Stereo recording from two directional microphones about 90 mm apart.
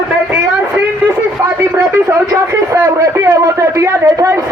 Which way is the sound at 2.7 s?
35° right (ahead or behind).